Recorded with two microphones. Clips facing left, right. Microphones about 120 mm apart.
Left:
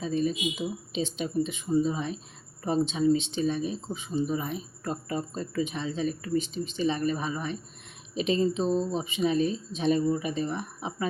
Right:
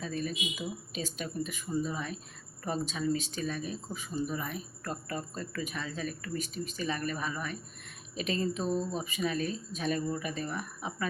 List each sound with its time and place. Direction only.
0.0 s speech: 25° left (ahead or behind)